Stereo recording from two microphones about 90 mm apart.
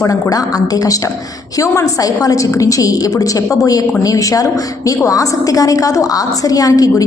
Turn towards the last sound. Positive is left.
turn(degrees=40)  # may be behind; listen again after turning